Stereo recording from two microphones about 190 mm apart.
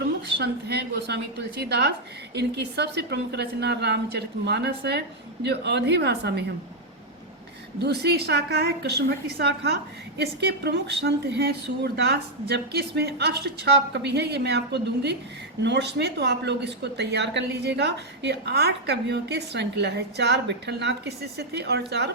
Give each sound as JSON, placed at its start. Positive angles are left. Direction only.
{"t": 0.3, "sound": "speech", "side_deg": -60}
{"t": 7.8, "sound": "speech", "side_deg": -60}